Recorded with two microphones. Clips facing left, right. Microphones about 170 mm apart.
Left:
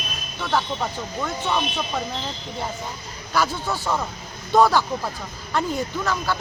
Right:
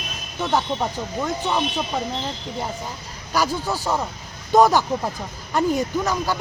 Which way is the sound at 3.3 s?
10° right (ahead or behind).